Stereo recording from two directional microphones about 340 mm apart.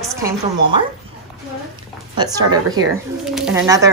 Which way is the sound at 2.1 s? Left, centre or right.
Centre.